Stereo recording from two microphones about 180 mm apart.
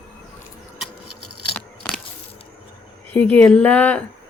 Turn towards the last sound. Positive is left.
turn(degrees=5)  # may be behind; listen again after turning